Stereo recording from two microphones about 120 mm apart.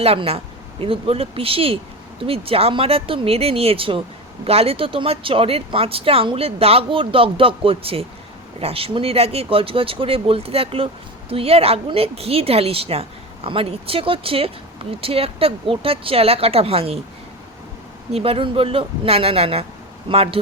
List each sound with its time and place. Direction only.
0.0 s a woman's voice: 55° right (ahead or behind)
18.1 s a woman's voice: 55° right (ahead or behind)